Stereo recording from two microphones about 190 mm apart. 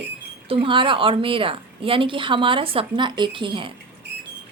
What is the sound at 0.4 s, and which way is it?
A woman's voice, 30° right (ahead or behind).